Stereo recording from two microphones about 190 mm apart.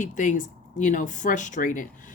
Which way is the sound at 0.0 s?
40° left (ahead or behind).